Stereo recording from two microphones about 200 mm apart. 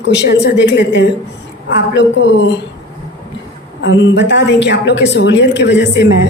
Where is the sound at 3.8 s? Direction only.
65° left (ahead or behind).